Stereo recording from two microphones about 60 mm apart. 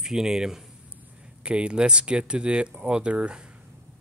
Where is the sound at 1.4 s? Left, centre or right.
Centre.